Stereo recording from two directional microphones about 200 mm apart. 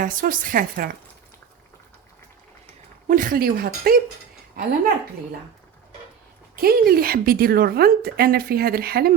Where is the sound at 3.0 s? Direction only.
40° right (ahead or behind).